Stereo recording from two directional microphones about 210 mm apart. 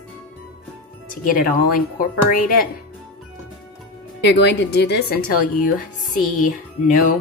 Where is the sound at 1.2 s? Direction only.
40° left (ahead or behind).